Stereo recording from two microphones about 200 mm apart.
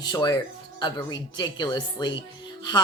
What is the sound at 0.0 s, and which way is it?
Speech, 20° left (ahead or behind).